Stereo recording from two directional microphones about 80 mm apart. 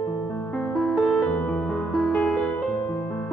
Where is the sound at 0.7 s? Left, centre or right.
Centre.